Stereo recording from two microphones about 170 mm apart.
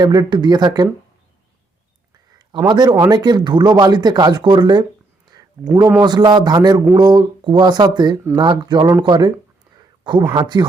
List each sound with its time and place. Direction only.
0.0 s speech: 25° right (ahead or behind)
2.6 s speech: 25° right (ahead or behind)
5.3 s a sound: 25° right (ahead or behind)
6.0 s speech: 25° right (ahead or behind)